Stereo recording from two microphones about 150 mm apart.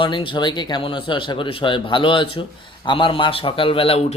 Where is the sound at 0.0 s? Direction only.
35° left (ahead or behind).